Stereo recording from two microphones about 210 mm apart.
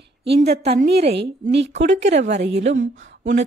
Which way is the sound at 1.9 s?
35° right (ahead or behind).